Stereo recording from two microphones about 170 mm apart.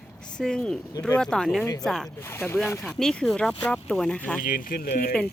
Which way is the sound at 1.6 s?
20° left (ahead or behind).